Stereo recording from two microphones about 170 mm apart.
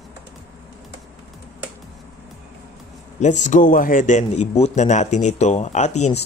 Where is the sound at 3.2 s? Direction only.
45° left (ahead or behind).